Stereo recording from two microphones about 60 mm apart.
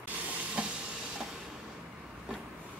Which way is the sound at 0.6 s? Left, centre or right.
Centre.